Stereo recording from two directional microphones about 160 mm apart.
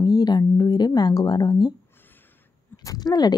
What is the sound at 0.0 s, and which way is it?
Speech, 25° left (ahead or behind).